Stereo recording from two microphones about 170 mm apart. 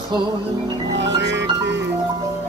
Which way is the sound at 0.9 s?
90° right.